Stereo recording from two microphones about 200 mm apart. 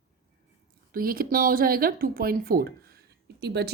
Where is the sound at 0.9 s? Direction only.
45° right (ahead or behind).